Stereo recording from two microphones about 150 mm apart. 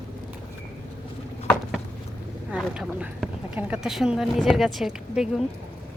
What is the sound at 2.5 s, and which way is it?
Speech, 5° right (ahead or behind).